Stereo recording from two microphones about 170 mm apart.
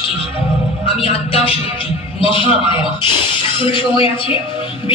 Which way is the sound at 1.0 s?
35° left (ahead or behind).